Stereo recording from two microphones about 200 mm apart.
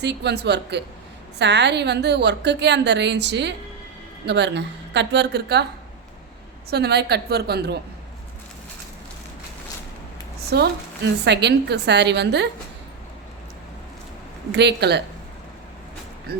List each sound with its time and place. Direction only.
0.0 s a woman's voice: 55° right (ahead or behind)
6.7 s a woman's voice: 55° right (ahead or behind)
10.5 s a woman's voice: 55° right (ahead or behind)
14.5 s a woman's voice: 55° right (ahead or behind)
16.3 s a woman's voice: 50° right (ahead or behind)